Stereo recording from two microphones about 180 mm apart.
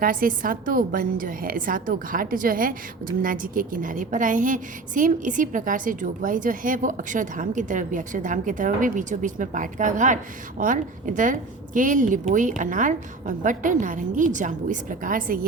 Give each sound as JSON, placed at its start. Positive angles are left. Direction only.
{"t": 0.0, "sound": "a woman's voice", "side_deg": -50}